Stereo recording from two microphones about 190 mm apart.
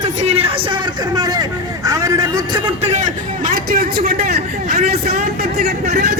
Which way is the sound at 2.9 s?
40° right (ahead or behind).